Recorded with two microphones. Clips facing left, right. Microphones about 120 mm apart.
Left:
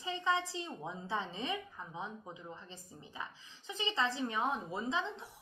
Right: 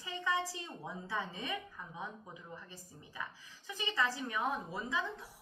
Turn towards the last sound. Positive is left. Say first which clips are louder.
# left 2 dB
turn(degrees=25)  # may be behind; listen again after turning